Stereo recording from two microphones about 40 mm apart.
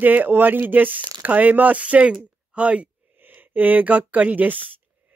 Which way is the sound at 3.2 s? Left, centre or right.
Right.